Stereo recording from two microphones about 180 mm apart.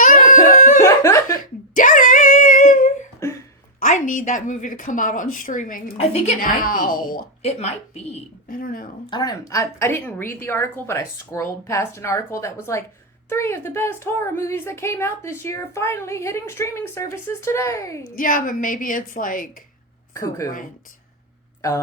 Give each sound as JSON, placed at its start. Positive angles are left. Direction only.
{"t": 0.0, "sound": "dog", "side_deg": 45}
{"t": 0.8, "sound": "laughter", "side_deg": 15}
{"t": 1.7, "sound": "a sound", "side_deg": 50}
{"t": 3.2, "sound": "a sound", "side_deg": 15}
{"t": 3.8, "sound": "a woman's voice", "side_deg": 45}
{"t": 7.4, "sound": "speech", "side_deg": 35}
{"t": 8.4, "sound": "a woman's voice", "side_deg": 50}
{"t": 9.0, "sound": "a woman's voice", "side_deg": 25}
{"t": 18.2, "sound": "a woman's voice", "side_deg": 50}
{"t": 20.1, "sound": "a woman's voice", "side_deg": 20}